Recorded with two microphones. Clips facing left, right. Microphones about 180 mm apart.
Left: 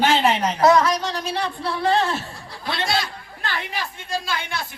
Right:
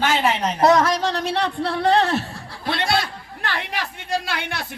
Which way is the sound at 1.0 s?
65° right (ahead or behind).